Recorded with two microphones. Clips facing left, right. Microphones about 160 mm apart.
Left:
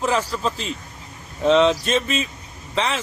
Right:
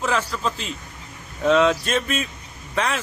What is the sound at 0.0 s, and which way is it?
Speech, 35° left (ahead or behind).